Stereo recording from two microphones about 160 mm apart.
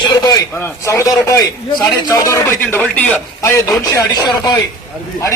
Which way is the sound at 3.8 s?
25° left (ahead or behind).